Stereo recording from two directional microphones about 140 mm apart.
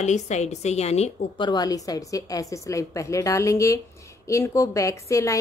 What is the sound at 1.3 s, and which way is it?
A woman's voice, 30° left (ahead or behind).